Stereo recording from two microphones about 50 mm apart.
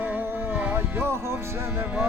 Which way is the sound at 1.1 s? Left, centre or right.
Right.